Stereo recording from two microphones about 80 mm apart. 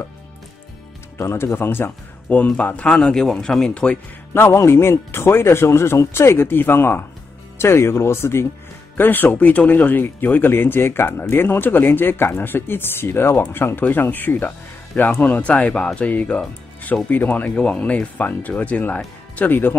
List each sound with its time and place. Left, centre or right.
1.1 s speech: left; by 4.0 s centre
4.3 s speech: left